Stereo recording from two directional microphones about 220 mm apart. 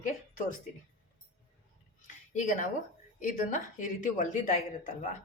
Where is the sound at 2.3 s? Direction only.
35° left (ahead or behind).